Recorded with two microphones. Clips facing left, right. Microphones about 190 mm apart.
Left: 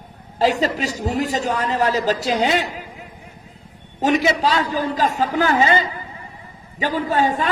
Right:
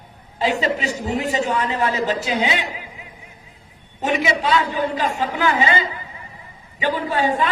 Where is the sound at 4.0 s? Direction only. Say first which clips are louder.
Left 3 dB; 40° left (ahead or behind).